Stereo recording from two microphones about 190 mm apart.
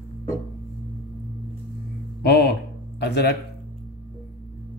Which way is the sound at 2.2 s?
60° left (ahead or behind).